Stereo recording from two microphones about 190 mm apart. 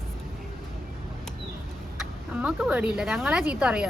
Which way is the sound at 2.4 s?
5° right (ahead or behind).